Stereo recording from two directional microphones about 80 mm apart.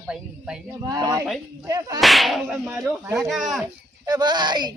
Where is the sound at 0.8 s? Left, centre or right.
Right.